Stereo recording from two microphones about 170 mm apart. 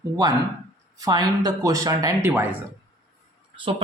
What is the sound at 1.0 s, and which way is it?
Speech, 25° right (ahead or behind).